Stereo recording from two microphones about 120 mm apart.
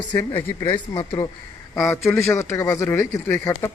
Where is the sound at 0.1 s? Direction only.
20° left (ahead or behind).